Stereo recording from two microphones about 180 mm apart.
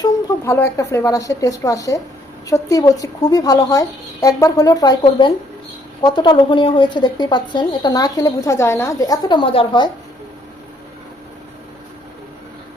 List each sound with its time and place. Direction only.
0.0 s a woman's voice: 15° left (ahead or behind)